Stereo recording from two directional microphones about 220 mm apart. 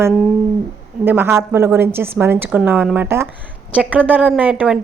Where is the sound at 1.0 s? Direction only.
10° right (ahead or behind).